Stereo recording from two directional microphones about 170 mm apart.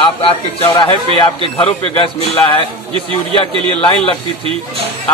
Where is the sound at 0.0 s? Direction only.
35° left (ahead or behind).